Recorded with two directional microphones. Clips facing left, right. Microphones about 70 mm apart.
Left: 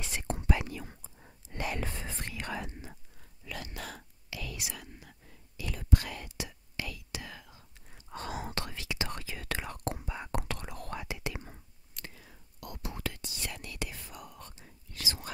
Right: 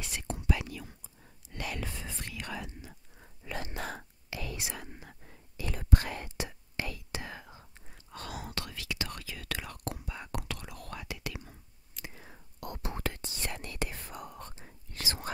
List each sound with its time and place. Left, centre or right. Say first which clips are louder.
0.0 s whispering: left 2 dB; left
1.9 s whispering: left 2 dB; left
3.2 s whispering: right 4 dB; right
8.1 s whispering: left 3 dB; left
12.1 s whispering: right 3 dB; right